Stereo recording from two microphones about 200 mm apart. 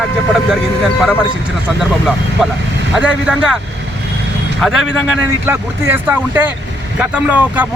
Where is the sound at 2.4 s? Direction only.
Centre (ahead or behind).